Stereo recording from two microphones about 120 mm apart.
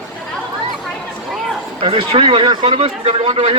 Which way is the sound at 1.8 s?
50° right (ahead or behind).